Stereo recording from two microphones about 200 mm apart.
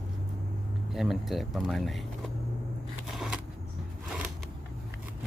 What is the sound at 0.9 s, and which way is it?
Speech, centre (ahead or behind).